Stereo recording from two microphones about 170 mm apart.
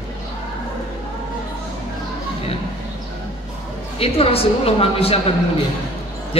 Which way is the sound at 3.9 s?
35° left (ahead or behind).